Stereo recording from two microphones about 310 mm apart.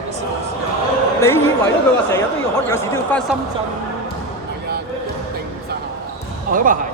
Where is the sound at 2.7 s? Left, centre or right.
Centre.